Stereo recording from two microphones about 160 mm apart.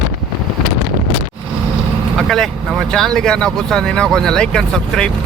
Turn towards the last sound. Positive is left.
turn(degrees=5)  # may be behind; listen again after turning